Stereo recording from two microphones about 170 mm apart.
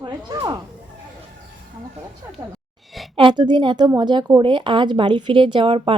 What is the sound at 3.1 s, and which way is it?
A woman's voice, 30° right (ahead or behind).